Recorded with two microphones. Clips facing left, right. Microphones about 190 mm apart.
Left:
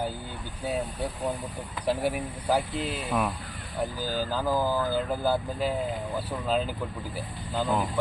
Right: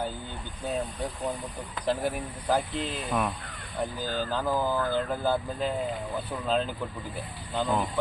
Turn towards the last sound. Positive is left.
turn(degrees=0)  # may be behind; listen again after turning